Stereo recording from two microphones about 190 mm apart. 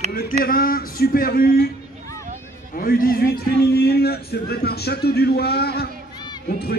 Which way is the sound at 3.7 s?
55° left (ahead or behind).